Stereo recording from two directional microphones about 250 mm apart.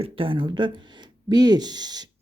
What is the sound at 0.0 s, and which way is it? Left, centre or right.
Speech, right.